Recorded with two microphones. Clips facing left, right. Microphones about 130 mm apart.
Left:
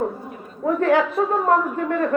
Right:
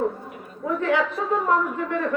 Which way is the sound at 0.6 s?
50° left (ahead or behind).